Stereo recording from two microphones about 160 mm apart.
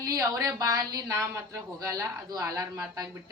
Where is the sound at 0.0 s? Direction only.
20° right (ahead or behind).